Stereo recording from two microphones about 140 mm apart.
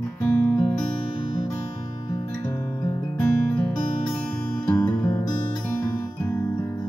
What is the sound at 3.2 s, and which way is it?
Music, 15° left (ahead or behind).